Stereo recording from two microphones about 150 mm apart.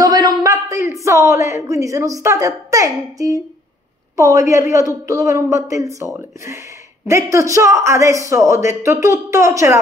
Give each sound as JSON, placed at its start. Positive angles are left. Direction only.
{"t": 0.0, "sound": "speech", "side_deg": -25}